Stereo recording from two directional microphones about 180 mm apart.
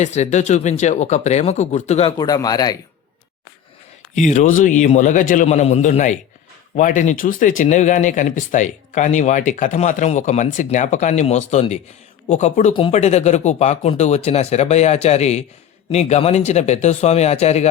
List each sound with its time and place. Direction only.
0.0 s speech: 40° left (ahead or behind)
2.2 s speech: 20° left (ahead or behind)
4.1 s speech: 40° left (ahead or behind)